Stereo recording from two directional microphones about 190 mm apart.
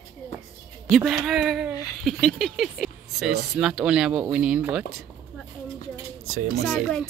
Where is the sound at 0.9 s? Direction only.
Centre (ahead or behind).